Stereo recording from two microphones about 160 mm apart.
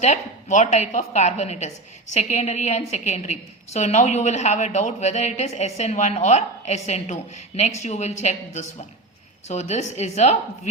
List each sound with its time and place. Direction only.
0.0 s a woman's voice: 45° left (ahead or behind)